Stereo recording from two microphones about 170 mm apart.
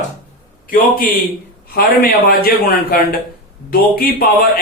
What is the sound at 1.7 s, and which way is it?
A man's voice, 65° left (ahead or behind).